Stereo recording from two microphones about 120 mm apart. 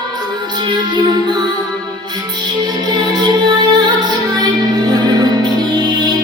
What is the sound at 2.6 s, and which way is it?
Music, 35° right (ahead or behind).